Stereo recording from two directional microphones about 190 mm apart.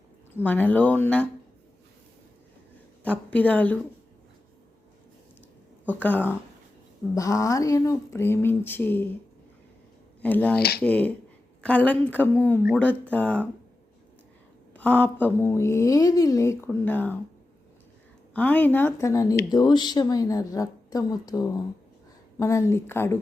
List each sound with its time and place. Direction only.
0.3 s a woman's voice: 10° left (ahead or behind)
3.0 s a woman's voice: 10° left (ahead or behind)
5.8 s a woman's voice: 10° left (ahead or behind)
10.2 s a woman's voice: 10° left (ahead or behind)
14.7 s a woman's voice: 10° left (ahead or behind)
18.3 s a woman's voice: 10° left (ahead or behind)